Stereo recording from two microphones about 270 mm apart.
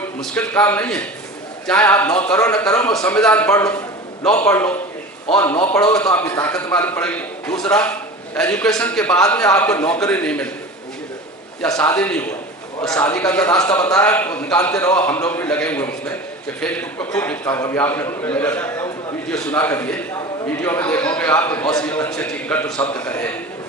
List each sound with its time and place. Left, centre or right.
0.2 s a man's voice: centre
11.6 s a man's voice: centre